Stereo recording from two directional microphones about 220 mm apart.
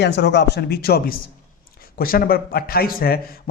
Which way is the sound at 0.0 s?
50° left (ahead or behind).